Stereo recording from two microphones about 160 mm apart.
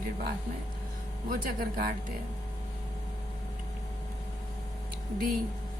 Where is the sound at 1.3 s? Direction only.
65° right (ahead or behind).